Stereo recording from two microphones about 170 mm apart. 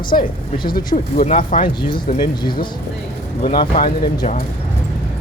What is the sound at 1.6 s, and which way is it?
Speech, 30° left (ahead or behind).